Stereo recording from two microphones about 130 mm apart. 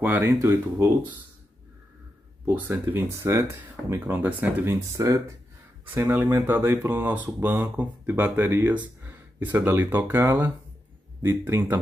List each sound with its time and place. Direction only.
0.0 s speech: 15° right (ahead or behind)
2.4 s speech: 15° right (ahead or behind)